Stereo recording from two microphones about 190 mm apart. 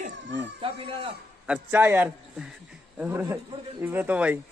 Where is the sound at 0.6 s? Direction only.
30° right (ahead or behind).